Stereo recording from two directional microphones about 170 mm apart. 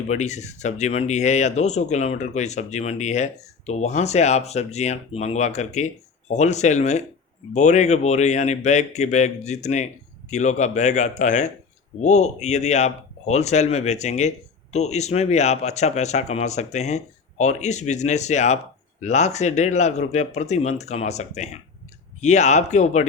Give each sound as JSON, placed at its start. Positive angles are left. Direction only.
{"t": 0.1, "sound": "speech", "side_deg": 45}